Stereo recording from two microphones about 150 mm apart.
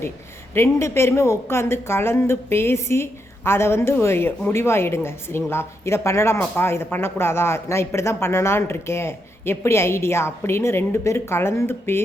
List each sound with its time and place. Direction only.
0.5 s speech: 20° left (ahead or behind)